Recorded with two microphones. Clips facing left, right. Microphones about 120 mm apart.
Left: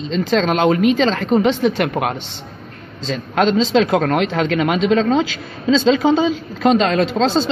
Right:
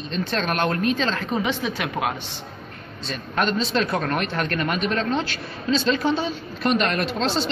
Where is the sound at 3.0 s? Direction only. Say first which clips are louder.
Left 7 dB; 90° left.